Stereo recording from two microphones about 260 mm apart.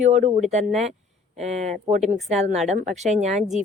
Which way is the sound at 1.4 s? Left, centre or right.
Right.